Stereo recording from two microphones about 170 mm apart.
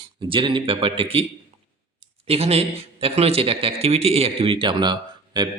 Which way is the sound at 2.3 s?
35° right (ahead or behind).